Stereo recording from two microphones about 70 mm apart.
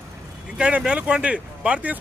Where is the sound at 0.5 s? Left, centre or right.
Centre.